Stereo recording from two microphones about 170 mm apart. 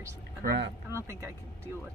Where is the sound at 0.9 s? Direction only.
15° right (ahead or behind).